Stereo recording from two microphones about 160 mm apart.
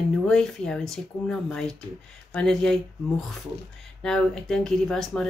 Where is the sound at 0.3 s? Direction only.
5° left (ahead or behind).